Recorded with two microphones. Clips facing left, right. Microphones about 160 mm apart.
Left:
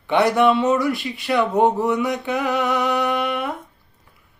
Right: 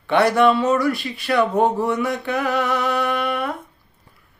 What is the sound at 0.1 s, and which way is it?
Speech, 20° left (ahead or behind).